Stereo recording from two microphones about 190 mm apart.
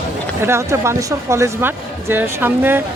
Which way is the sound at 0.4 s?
15° right (ahead or behind).